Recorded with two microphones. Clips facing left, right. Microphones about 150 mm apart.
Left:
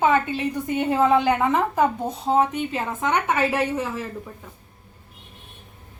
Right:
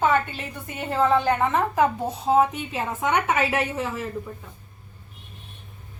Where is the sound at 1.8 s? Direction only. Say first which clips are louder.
Even; 5° right (ahead or behind).